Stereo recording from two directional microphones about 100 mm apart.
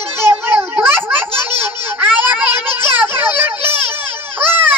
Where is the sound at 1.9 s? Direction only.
15° right (ahead or behind).